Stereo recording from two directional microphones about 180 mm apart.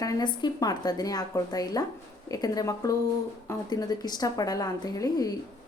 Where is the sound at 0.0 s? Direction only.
25° left (ahead or behind).